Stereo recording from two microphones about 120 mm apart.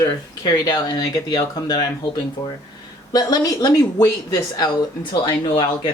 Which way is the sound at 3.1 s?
35° left (ahead or behind).